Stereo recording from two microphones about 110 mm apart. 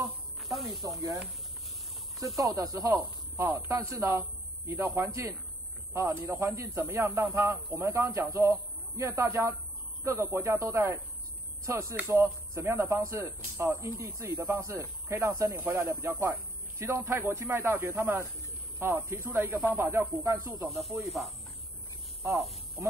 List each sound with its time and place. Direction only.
0.4 s snake: centre (ahead or behind)
2.3 s a man's voice: 30° right (ahead or behind)
21.0 s speech: centre (ahead or behind)
22.8 s speech: 25° right (ahead or behind)